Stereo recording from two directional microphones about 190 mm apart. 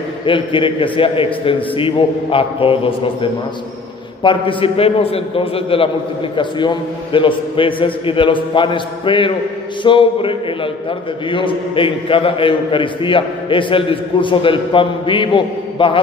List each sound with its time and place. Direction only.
0.2 s a man's voice: 25° left (ahead or behind)